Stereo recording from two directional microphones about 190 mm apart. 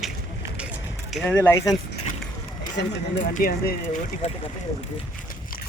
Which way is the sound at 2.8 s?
60° left (ahead or behind).